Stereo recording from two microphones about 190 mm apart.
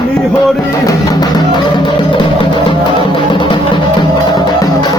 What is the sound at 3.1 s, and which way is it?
Music, 25° left (ahead or behind).